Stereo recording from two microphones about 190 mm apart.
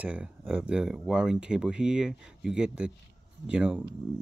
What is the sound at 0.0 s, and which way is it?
Speech, 5° right (ahead or behind).